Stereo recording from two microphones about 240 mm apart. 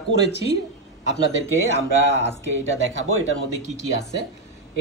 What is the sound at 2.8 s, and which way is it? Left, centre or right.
Speech, right.